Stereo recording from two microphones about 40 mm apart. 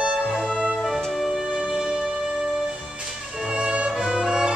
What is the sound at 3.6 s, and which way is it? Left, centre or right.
Music, right.